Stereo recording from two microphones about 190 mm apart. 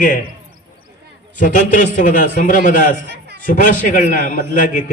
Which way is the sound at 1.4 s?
45° left (ahead or behind).